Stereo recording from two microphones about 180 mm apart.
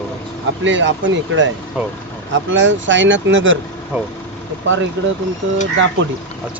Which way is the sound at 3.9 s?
10° right (ahead or behind).